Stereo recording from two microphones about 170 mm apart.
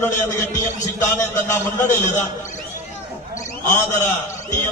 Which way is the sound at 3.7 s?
15° left (ahead or behind).